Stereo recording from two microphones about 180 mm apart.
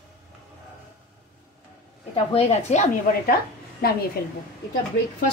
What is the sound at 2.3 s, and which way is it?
Speech, 30° left (ahead or behind).